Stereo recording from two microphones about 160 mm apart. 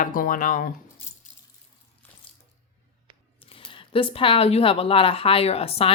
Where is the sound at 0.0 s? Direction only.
60° left (ahead or behind).